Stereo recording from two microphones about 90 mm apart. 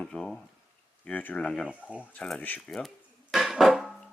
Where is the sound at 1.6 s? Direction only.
15° right (ahead or behind).